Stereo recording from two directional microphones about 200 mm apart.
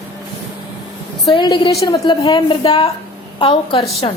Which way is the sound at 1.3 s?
20° left (ahead or behind).